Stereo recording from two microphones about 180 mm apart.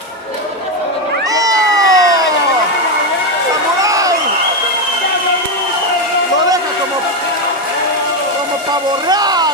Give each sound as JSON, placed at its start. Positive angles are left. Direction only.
{"t": 1.3, "sound": "cat", "side_deg": -20}
{"t": 3.8, "sound": "a sound", "side_deg": -20}
{"t": 9.1, "sound": "vehicle", "side_deg": -20}